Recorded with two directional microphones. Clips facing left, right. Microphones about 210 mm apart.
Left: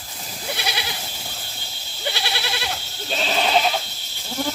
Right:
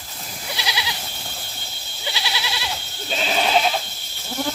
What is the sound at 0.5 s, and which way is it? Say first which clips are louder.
Goat: even; 55° left (ahead or behind).